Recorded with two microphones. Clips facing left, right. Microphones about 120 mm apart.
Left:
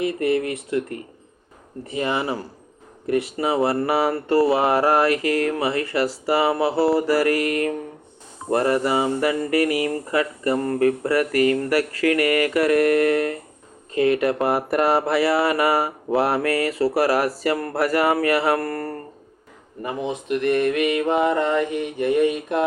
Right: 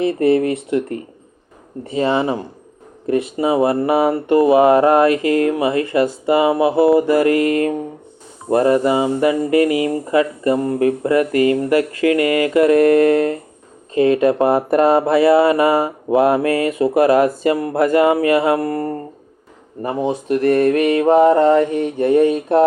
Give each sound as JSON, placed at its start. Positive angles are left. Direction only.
{"t": 0.0, "sound": "speech", "side_deg": -30}
{"t": 19.8, "sound": "mantra", "side_deg": -35}